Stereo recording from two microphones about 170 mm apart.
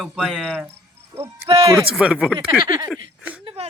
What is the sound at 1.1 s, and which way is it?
Speech, 20° right (ahead or behind).